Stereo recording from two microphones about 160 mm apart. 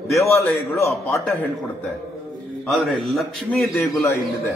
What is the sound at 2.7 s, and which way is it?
A man's voice, centre (ahead or behind).